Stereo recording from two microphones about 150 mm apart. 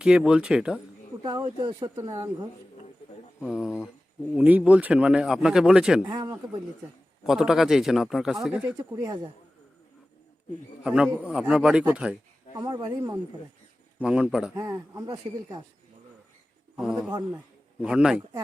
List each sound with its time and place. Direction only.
0.0 s a man's voice: 5° right (ahead or behind)
1.2 s speech: 30° right (ahead or behind)
3.4 s a man's voice: 5° right (ahead or behind)
6.1 s speech: 25° right (ahead or behind)
7.3 s a man's voice: 5° right (ahead or behind)
9.0 s speech: 30° right (ahead or behind)
10.8 s a man's voice: 5° right (ahead or behind)
12.5 s speech: 30° right (ahead or behind)
14.0 s a man's voice: 5° right (ahead or behind)
14.5 s speech: 25° right (ahead or behind)
16.7 s a man's voice: 5° right (ahead or behind)